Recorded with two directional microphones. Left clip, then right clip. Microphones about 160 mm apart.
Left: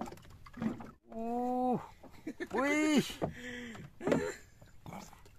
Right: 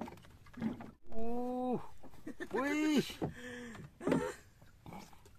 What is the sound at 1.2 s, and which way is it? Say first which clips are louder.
Wild animals: left 5 dB; 50° left (ahead or behind).